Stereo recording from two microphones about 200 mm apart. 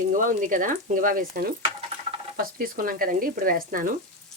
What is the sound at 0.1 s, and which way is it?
Speech, 40° right (ahead or behind).